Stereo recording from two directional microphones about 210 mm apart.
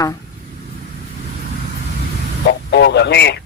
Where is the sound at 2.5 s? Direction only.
50° left (ahead or behind).